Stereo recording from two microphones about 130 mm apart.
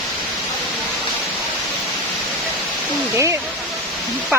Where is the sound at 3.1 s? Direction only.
20° right (ahead or behind).